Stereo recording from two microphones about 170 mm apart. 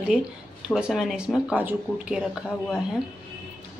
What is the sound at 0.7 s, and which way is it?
A woman's voice, 5° right (ahead or behind).